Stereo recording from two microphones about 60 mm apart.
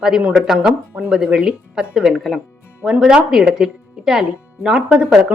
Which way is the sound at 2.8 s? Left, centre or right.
Centre.